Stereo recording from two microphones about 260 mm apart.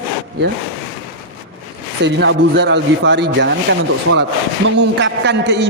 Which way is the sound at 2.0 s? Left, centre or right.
Right.